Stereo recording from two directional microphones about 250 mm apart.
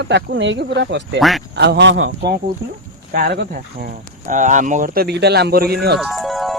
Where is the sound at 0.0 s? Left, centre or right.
Right.